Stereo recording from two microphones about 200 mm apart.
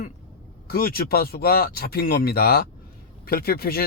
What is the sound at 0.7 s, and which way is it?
Speech, 50° left (ahead or behind).